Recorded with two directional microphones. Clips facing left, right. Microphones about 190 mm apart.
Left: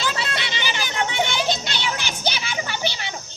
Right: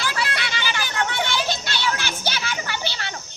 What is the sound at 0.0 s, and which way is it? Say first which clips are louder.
Children playing: even; 20° left (ahead or behind).